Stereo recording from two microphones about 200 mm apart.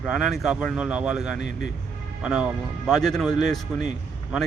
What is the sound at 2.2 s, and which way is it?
A man's voice, 5° right (ahead or behind).